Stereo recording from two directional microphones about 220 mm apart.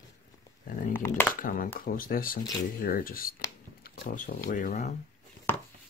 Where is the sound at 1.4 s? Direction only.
40° left (ahead or behind).